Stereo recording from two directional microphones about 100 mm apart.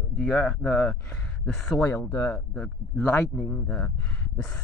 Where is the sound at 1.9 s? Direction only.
25° left (ahead or behind).